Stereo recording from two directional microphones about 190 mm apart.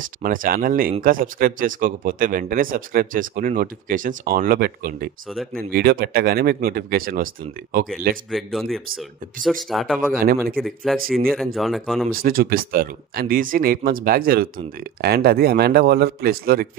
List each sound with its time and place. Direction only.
0.2 s speech: 45° right (ahead or behind)
5.3 s speech: centre (ahead or behind)
5.7 s speech: 55° right (ahead or behind)
8.3 s speech: centre (ahead or behind)
10.1 s speech: 50° right (ahead or behind)
10.6 s speech: centre (ahead or behind)
12.1 s a man's voice: 50° right (ahead or behind)